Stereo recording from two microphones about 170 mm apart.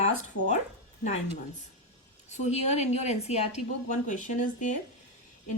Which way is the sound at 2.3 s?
40° left (ahead or behind).